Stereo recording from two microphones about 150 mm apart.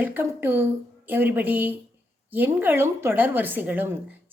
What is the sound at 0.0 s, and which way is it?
A woman's voice, 15° right (ahead or behind).